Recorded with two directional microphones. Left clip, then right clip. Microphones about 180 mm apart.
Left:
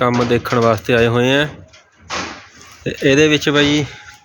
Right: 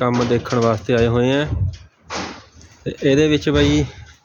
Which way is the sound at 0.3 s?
20° left (ahead or behind).